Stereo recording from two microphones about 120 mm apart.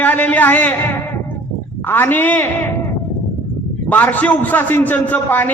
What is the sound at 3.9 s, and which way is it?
A man's voice, 15° left (ahead or behind).